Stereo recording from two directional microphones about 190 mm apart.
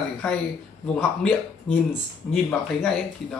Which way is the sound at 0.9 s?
5° left (ahead or behind).